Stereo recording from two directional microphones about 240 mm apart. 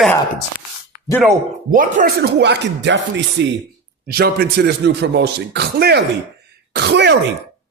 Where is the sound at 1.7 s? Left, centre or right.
Right.